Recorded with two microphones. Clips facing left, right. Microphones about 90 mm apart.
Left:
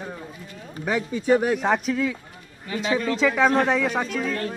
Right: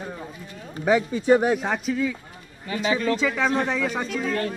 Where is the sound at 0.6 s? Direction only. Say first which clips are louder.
Right 5 dB; centre (ahead or behind).